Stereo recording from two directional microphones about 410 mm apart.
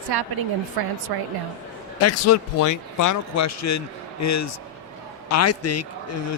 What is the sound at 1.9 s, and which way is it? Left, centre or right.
A man's voice, left.